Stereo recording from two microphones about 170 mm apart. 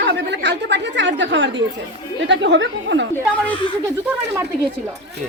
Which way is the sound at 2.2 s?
90° right.